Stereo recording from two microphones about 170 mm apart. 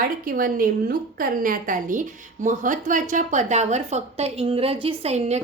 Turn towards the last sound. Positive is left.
turn(degrees=-40)  # may be behind; listen again after turning